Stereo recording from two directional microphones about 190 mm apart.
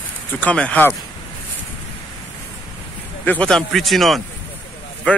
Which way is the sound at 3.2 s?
5° left (ahead or behind).